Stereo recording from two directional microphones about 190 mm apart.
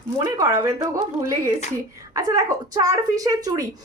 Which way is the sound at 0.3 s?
20° right (ahead or behind).